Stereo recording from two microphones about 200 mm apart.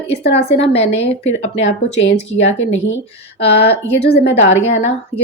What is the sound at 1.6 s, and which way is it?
Speech, 65° left (ahead or behind).